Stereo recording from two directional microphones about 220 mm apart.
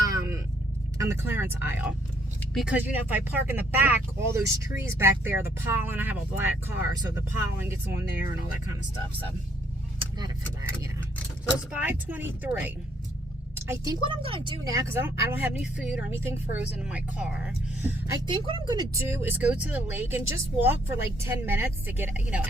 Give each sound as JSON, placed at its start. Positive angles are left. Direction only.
{"t": 0.0, "sound": "a sound", "side_deg": -15}
{"t": 0.9, "sound": "speech", "side_deg": -10}
{"t": 10.0, "sound": "vehicle", "side_deg": -20}
{"t": 11.7, "sound": "speech", "side_deg": -10}
{"t": 18.1, "sound": "speech", "side_deg": -20}